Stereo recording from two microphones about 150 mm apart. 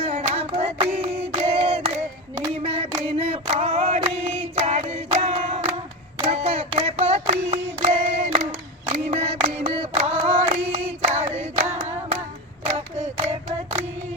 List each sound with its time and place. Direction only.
0.0 s hands: 40° right (ahead or behind)
0.5 s a sound: 40° right (ahead or behind)
2.6 s female singing: 40° right (ahead or behind)
4.2 s choir: 45° right (ahead or behind)
6.2 s child singing: 40° right (ahead or behind)
8.9 s a sound: 45° right (ahead or behind)
12.6 s hands: 50° right (ahead or behind)
13.2 s female singing: 50° right (ahead or behind)